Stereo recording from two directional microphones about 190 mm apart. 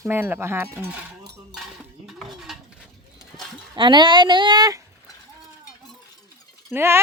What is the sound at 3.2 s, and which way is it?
Livestock, centre (ahead or behind).